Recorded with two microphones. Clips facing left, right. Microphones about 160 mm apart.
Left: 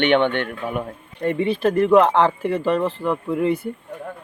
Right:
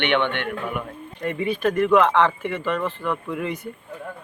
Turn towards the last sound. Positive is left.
turn(degrees=30)  # may be behind; listen again after turning